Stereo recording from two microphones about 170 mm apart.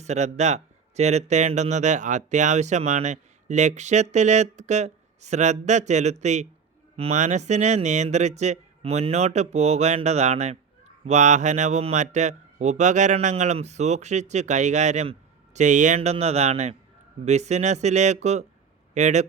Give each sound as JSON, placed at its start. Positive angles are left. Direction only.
{"t": 0.0, "sound": "speech", "side_deg": -40}